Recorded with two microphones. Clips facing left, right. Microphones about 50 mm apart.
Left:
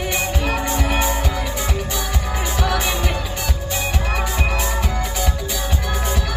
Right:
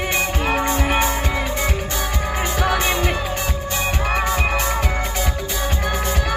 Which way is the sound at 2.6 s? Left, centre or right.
Right.